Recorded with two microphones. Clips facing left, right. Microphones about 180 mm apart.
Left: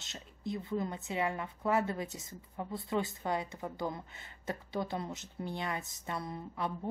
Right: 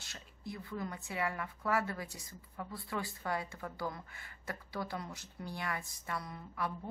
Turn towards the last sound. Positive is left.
turn(degrees=25)  # may be behind; listen again after turning